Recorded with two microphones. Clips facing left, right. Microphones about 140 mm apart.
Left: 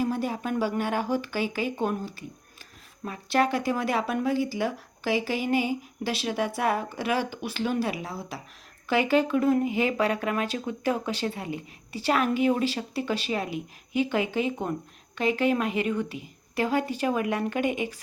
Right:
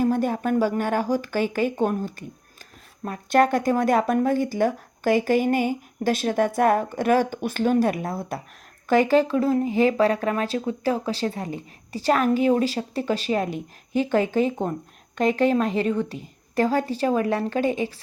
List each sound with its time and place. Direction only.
0.0 s speech: 50° right (ahead or behind)
17.8 s speech: 15° left (ahead or behind)